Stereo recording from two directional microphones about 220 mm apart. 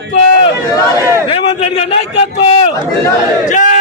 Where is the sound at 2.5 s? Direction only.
25° left (ahead or behind).